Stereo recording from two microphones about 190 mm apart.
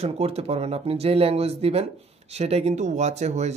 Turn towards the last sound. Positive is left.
turn(degrees=-35)  # may be behind; listen again after turning